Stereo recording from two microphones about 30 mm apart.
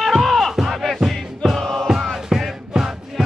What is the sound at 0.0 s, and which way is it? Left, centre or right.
Music, centre.